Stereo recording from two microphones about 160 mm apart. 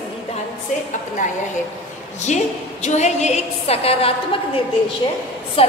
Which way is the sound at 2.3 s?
45° left (ahead or behind).